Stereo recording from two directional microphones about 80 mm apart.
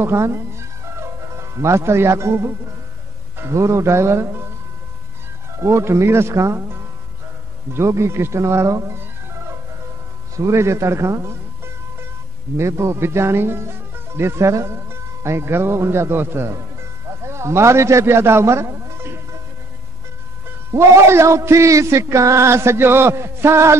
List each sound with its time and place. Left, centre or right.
0.0 s speech: right
5.6 s speech: right
10.3 s a man's voice: right
20.7 s speech: right